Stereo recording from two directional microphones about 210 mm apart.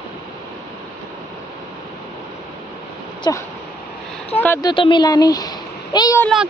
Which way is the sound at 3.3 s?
15° left (ahead or behind).